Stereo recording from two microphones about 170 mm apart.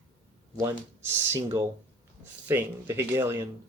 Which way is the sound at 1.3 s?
15° right (ahead or behind).